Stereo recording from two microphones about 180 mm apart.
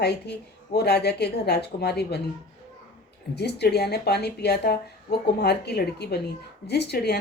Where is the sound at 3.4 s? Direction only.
65° left (ahead or behind).